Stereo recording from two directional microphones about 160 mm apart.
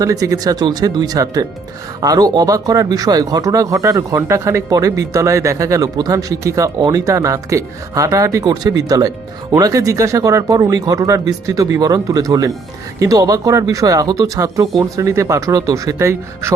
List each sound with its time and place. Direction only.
0.0 s speech: 20° right (ahead or behind)